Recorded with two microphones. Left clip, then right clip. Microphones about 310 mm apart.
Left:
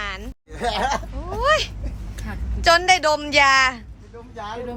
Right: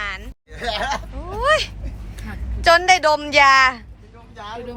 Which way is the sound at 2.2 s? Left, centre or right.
Centre.